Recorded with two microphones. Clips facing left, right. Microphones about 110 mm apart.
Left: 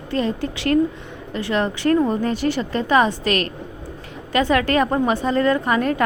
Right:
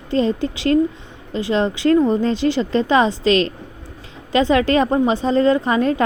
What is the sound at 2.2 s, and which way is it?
Speech, 20° right (ahead or behind).